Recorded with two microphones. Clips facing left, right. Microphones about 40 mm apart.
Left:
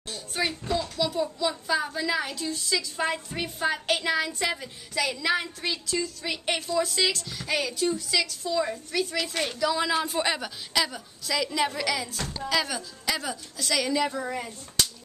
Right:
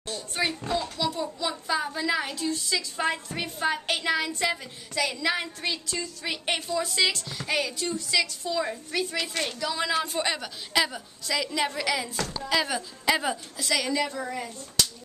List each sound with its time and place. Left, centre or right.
0.0 s a child's voice: centre
10.7 s a woman's voice: centre
13.1 s a woman's voice: right
13.6 s a woman's voice: centre
14.0 s a woman's voice: centre